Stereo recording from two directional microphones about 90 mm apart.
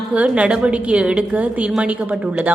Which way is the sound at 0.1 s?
15° right (ahead or behind).